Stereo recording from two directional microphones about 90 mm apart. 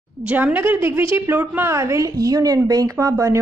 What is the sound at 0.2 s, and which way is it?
A woman's voice, 20° right (ahead or behind).